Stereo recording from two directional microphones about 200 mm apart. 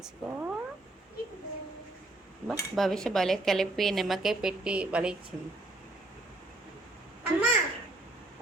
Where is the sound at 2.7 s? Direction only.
Centre (ahead or behind).